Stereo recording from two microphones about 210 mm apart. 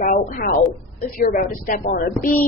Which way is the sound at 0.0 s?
40° left (ahead or behind).